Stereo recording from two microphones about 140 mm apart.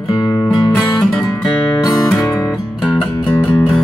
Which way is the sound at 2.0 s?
5° left (ahead or behind).